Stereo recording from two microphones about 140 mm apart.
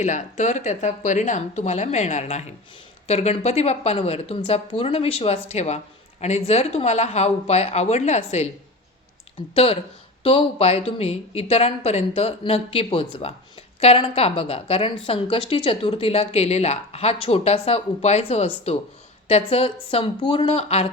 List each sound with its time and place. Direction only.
0.0 s a woman's voice: 55° left (ahead or behind)
10.2 s a woman's voice: 45° left (ahead or behind)